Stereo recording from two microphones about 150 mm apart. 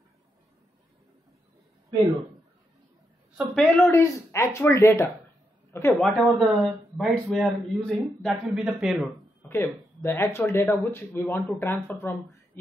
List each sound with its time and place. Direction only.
3.3 s a woman's voice: centre (ahead or behind)
3.9 s a woman's voice: 20° left (ahead or behind)
5.9 s speech: centre (ahead or behind)
9.5 s speech: 15° left (ahead or behind)